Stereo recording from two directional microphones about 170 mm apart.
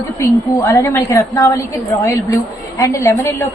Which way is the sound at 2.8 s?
20° left (ahead or behind).